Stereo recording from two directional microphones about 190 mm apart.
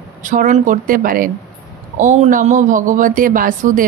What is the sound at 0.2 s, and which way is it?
Speech, 40° right (ahead or behind).